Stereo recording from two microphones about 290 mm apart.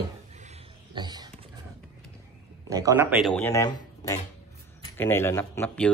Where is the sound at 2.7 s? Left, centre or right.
Centre.